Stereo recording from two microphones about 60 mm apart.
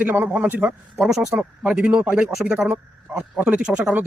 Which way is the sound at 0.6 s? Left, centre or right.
Centre.